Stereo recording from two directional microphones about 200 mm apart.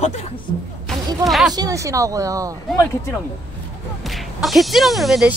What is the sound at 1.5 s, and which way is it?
Speech, 20° right (ahead or behind).